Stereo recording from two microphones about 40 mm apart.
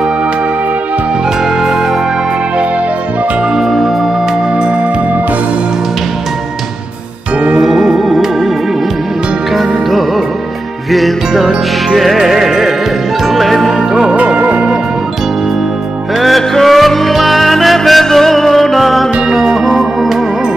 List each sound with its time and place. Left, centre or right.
3.5 s music: centre
7.6 s music: centre
9.6 s music: centre
13.7 s music: centre
14.1 s music: right
16.2 s music: centre